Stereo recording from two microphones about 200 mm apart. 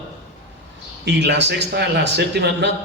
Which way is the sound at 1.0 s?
60° right (ahead or behind).